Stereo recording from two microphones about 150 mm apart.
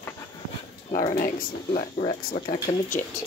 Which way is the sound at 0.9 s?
70° left (ahead or behind).